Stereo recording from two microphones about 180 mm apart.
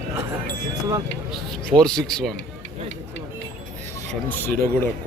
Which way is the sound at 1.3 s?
5° left (ahead or behind).